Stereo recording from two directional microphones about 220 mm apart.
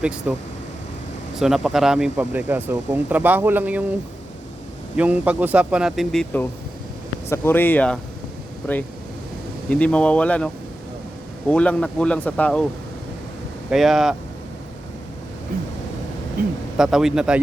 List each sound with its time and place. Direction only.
0.0 s speech: 5° right (ahead or behind)
1.4 s speech: centre (ahead or behind)
4.9 s speech: 5° right (ahead or behind)
9.6 s speech: 5° left (ahead or behind)
13.7 s speech: centre (ahead or behind)
16.4 s speech: 40° right (ahead or behind)
16.7 s speech: centre (ahead or behind)